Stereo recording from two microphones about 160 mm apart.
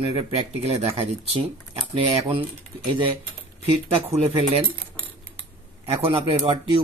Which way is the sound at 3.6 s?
35° right (ahead or behind).